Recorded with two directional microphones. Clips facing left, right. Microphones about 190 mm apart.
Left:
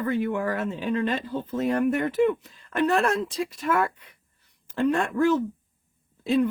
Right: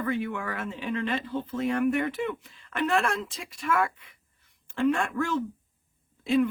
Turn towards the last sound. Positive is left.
turn(degrees=35)  # may be behind; listen again after turning